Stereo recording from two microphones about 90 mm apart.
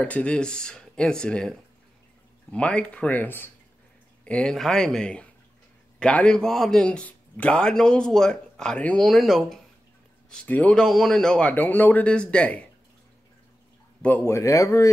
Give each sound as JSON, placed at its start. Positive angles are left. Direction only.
{"t": 0.0, "sound": "a man's voice", "side_deg": 15}
{"t": 2.5, "sound": "a man's voice", "side_deg": 10}
{"t": 10.3, "sound": "a man's voice", "side_deg": 15}
{"t": 14.0, "sound": "speech", "side_deg": 20}
{"t": 14.3, "sound": "speech", "side_deg": 35}